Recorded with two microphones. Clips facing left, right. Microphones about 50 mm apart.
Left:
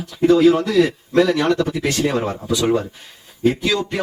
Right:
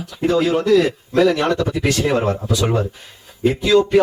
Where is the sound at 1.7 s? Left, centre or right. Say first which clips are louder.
Right 2 dB; centre.